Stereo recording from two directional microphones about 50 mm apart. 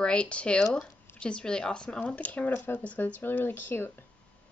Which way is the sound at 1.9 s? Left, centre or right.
Left.